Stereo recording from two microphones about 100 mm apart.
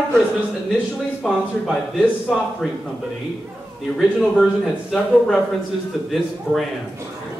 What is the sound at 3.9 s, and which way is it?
Speech, centre (ahead or behind).